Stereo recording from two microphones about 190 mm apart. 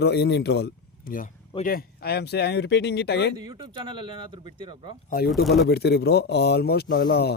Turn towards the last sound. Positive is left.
turn(degrees=55)  # may be behind; listen again after turning